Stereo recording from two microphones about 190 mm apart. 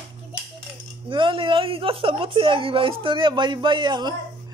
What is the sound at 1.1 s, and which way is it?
A woman's voice, 25° right (ahead or behind).